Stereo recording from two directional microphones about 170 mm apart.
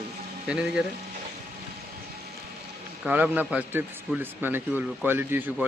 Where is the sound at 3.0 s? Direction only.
10° right (ahead or behind).